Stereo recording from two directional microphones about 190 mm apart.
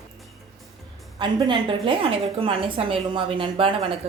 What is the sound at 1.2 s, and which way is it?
A woman's voice, 25° right (ahead or behind).